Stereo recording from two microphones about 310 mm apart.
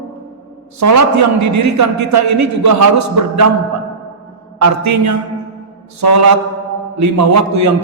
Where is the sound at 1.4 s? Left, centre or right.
Right.